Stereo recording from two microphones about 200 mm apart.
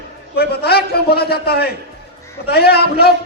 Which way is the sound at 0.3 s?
55° left (ahead or behind).